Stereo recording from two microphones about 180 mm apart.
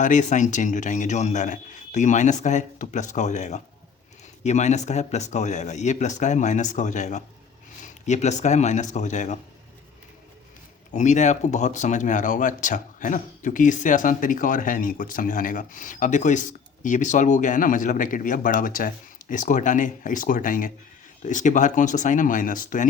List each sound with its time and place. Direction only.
0.0 s speech: 45° left (ahead or behind)
10.9 s speech: 40° left (ahead or behind)